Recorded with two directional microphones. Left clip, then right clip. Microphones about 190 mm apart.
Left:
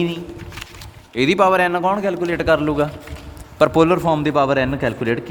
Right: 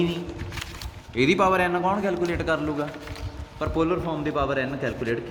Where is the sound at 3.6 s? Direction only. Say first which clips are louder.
Left 11 dB; 60° left (ahead or behind).